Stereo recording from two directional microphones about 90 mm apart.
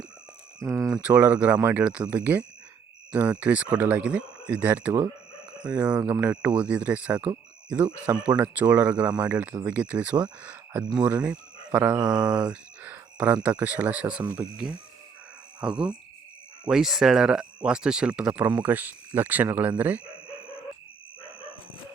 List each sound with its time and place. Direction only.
0.9 s speech: 10° right (ahead or behind)
11.9 s mantra: 55° right (ahead or behind)
12.3 s speech: 10° right (ahead or behind)